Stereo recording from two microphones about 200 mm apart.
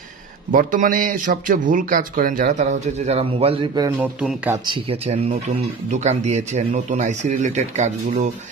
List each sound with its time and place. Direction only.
0.5 s a man's voice: 45° right (ahead or behind); by 4.3 s 15° right (ahead or behind)
4.5 s a man's voice: 25° right (ahead or behind)